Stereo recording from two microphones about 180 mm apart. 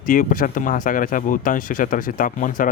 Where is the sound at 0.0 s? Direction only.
50° left (ahead or behind).